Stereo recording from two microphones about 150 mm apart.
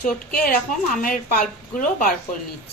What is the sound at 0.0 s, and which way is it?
Speech, 75° left (ahead or behind).